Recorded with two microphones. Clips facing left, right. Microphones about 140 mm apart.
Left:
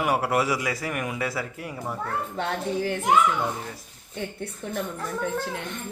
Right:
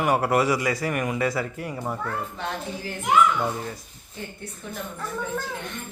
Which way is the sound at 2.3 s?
65° left (ahead or behind).